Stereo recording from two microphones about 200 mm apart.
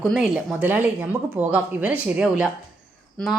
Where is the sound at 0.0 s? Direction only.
Centre (ahead or behind).